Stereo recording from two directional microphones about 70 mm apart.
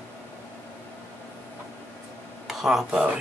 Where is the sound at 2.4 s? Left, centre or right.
Centre.